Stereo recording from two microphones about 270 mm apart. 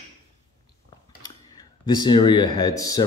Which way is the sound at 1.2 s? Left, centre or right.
Centre.